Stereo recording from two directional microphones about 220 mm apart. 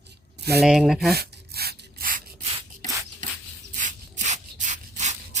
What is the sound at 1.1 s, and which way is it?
Rub, 45° right (ahead or behind).